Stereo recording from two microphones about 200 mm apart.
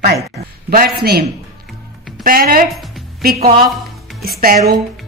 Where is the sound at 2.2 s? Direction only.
45° right (ahead or behind).